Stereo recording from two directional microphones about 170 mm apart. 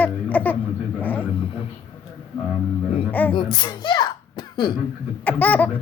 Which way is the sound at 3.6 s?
25° left (ahead or behind).